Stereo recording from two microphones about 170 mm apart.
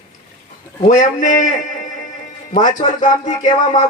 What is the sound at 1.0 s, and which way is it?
Speech, 45° left (ahead or behind).